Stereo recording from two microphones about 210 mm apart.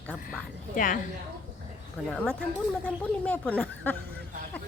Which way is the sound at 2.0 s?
5° left (ahead or behind).